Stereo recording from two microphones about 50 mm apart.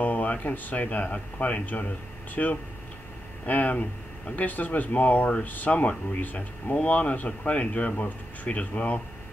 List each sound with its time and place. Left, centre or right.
0.0 s speech: left